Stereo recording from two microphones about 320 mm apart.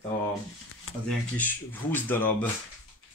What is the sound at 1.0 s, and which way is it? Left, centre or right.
Speech, centre.